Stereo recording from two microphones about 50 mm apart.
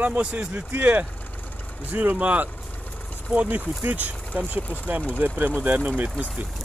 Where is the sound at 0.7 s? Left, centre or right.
Right.